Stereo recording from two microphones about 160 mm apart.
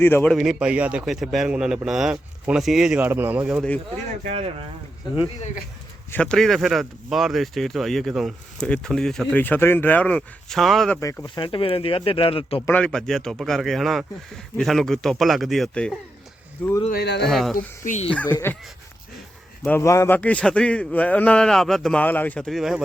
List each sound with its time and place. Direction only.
0.0 s speech: 10° left (ahead or behind)
0.3 s speech: 5° right (ahead or behind)
4.2 s speech: 40° right (ahead or behind)
6.1 s speech: 5° left (ahead or behind)
11.0 s speech: 20° left (ahead or behind)
11.4 s speech: 35° left (ahead or behind)
12.6 s speech: 10° left (ahead or behind)
16.9 s a man's voice: 90° left
17.2 s speech: centre (ahead or behind)
17.8 s speech: 45° left (ahead or behind)
19.6 s speech: 15° left (ahead or behind); by 22.8 s centre (ahead or behind)